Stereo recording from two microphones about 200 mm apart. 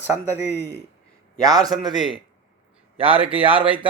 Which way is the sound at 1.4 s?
20° right (ahead or behind).